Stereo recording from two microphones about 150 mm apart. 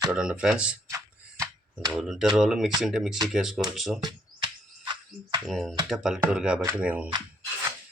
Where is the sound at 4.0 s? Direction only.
25° right (ahead or behind).